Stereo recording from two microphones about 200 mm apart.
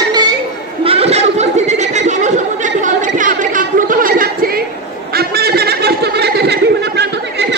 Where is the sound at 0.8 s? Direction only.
30° right (ahead or behind).